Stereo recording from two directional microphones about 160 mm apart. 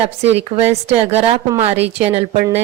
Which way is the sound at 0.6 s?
40° right (ahead or behind).